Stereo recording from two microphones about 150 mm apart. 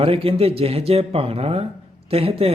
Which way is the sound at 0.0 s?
40° right (ahead or behind).